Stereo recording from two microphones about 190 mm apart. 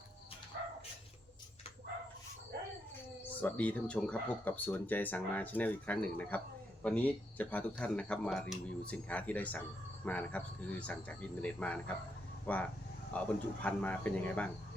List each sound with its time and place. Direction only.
2.5 s dog: 60° right (ahead or behind)
3.4 s speech: 10° left (ahead or behind)